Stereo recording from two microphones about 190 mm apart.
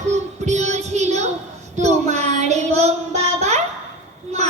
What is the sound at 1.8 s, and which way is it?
Child singing, 35° right (ahead or behind).